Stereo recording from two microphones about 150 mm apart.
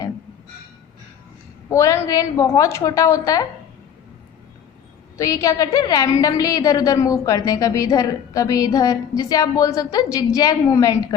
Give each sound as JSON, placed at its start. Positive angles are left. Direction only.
{"t": 1.7, "sound": "a woman's voice", "side_deg": 20}
{"t": 5.1, "sound": "a woman's voice", "side_deg": 20}